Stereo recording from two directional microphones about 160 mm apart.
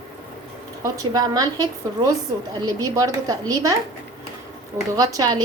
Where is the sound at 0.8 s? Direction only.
20° right (ahead or behind).